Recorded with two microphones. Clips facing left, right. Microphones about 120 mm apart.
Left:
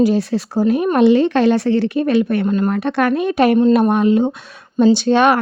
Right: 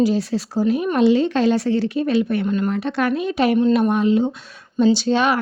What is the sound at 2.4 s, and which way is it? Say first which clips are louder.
Speech: left 4 dB; 40° left (ahead or behind).